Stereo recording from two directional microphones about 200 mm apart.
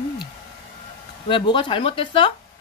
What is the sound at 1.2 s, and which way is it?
Speech, 25° left (ahead or behind).